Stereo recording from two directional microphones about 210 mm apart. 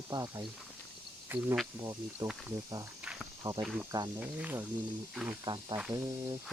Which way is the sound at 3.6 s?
5° right (ahead or behind).